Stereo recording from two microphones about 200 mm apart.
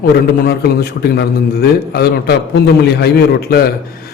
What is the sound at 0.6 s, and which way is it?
A man's voice, 55° left (ahead or behind).